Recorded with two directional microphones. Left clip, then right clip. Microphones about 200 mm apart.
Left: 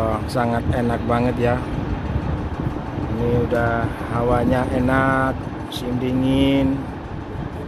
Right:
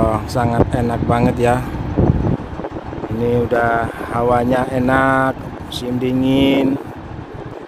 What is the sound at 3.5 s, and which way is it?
Speech, 40° right (ahead or behind).